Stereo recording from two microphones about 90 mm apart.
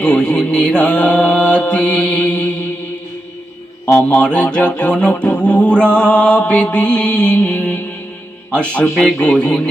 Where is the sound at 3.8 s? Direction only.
30° left (ahead or behind).